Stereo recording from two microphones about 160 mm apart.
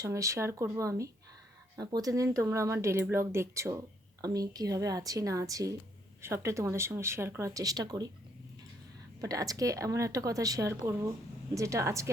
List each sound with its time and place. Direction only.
0.0 s speech: 20° right (ahead or behind)
9.2 s speech: 20° right (ahead or behind)